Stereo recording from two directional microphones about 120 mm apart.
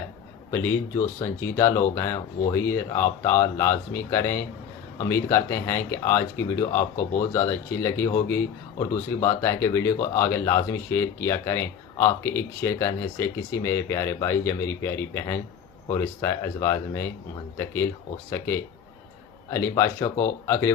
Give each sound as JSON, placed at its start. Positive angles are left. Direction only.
{"t": 0.5, "sound": "speech", "side_deg": 25}
{"t": 18.3, "sound": "speech", "side_deg": 20}